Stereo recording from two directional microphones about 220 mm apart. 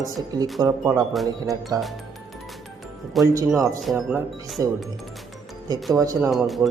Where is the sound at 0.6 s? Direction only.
15° right (ahead or behind).